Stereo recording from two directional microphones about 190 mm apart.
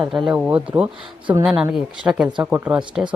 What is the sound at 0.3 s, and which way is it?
Speech, 5° right (ahead or behind).